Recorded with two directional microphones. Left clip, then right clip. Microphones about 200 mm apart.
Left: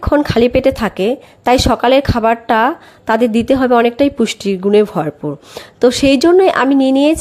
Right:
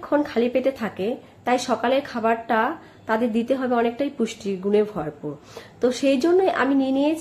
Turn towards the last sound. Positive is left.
turn(degrees=45)  # may be behind; listen again after turning